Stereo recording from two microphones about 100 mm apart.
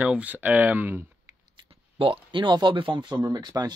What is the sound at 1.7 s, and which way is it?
Speech, 60° right (ahead or behind).